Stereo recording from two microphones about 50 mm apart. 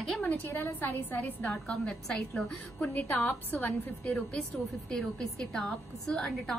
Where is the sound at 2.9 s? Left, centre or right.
Left.